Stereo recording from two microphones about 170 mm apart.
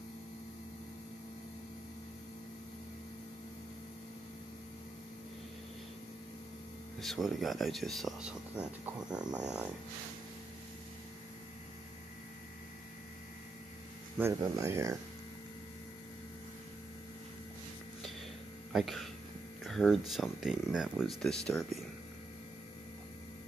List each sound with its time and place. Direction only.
7.0 s speech: centre (ahead or behind)
14.1 s speech: 15° right (ahead or behind)
18.7 s speech: centre (ahead or behind)